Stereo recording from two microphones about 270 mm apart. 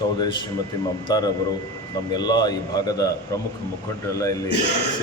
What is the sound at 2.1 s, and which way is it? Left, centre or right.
A man's voice, centre.